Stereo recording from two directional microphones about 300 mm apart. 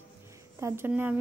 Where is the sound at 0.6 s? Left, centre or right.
Centre.